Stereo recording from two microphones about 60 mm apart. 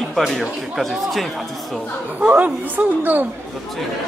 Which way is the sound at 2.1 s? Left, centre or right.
Right.